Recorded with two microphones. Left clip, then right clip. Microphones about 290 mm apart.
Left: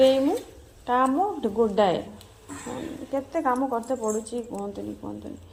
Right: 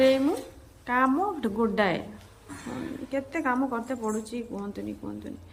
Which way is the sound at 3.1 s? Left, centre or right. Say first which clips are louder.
Left 3 dB; centre.